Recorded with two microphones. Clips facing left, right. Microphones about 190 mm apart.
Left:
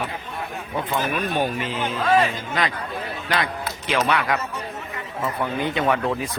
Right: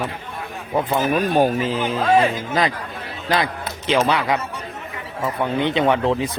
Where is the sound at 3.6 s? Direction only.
25° right (ahead or behind).